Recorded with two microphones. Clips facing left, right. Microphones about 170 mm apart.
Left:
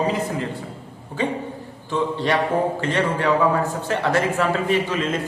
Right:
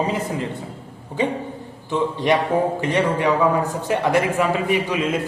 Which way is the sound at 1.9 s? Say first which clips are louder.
Right 2 dB; 20° right (ahead or behind).